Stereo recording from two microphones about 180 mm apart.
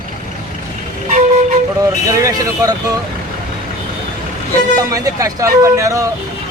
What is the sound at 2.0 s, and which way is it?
Speech, 20° right (ahead or behind).